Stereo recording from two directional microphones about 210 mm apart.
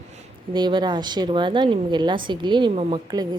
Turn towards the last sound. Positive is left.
turn(degrees=-20)  # may be behind; listen again after turning